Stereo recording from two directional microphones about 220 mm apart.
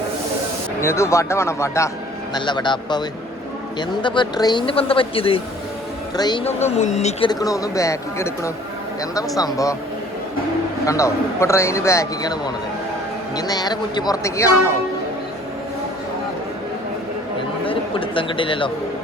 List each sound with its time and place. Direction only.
0.8 s a man's voice: 10° left (ahead or behind); by 7.3 s 30° left (ahead or behind)
7.3 s a man's voice: 15° left (ahead or behind)
10.8 s a man's voice: 15° left (ahead or behind)
17.7 s speech: 25° left (ahead or behind)